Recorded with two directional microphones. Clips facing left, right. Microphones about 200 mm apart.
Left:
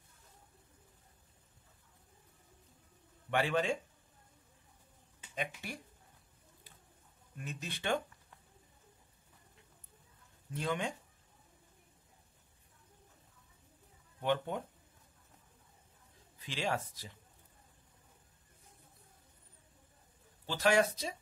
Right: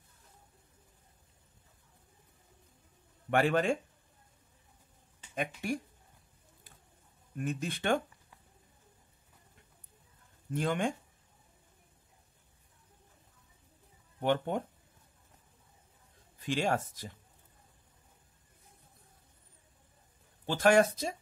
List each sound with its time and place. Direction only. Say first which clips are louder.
3.3 s speech: right 5 dB; 50° right (ahead or behind)
5.3 s speech: right 7 dB; 50° right (ahead or behind)
7.3 s speech: right 9 dB; 50° right (ahead or behind)
10.5 s speech: right 5 dB; 50° right (ahead or behind)
14.2 s speech: right 4 dB; 50° right (ahead or behind)
16.3 s speech: right 6 dB; 50° right (ahead or behind)
20.4 s speech: right 5 dB; 50° right (ahead or behind)